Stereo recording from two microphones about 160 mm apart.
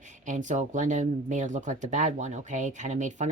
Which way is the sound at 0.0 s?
50° right (ahead or behind).